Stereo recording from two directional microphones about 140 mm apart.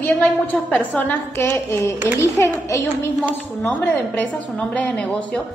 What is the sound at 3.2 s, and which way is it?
A woman's voice, 10° left (ahead or behind).